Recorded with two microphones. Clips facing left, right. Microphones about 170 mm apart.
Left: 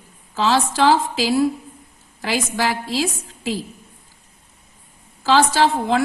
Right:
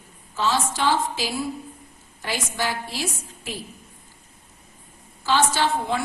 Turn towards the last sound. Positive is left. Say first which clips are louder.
# left 6 dB
turn(degrees=90)